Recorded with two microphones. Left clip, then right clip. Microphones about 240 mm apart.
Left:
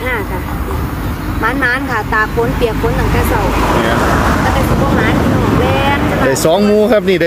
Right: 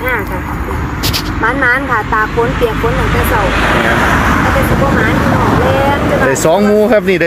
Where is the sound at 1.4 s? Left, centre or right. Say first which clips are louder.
Right 2 dB; centre.